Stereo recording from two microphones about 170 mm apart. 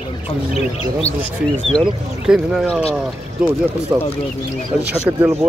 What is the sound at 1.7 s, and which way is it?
Speech, 5° right (ahead or behind).